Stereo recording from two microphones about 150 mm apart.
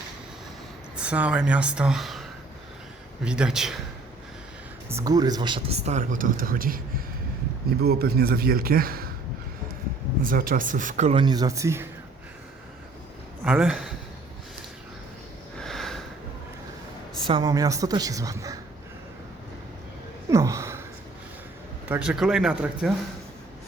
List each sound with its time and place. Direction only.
0.9 s speech: 10° right (ahead or behind)
3.2 s speech: 5° right (ahead or behind)
4.9 s speech: 20° right (ahead or behind); by 6.8 s 70° right (ahead or behind)
7.9 s speech: 90° right
10.2 s speech: 70° right (ahead or behind)
11.1 s a woman's voice: 30° right (ahead or behind)
13.4 s speech: 5° right (ahead or behind)
15.5 s sniff: centre (ahead or behind)
17.2 s a woman's voice: 30° right (ahead or behind)
20.3 s a sound: 20° right (ahead or behind)
21.8 s speech: 5° right (ahead or behind)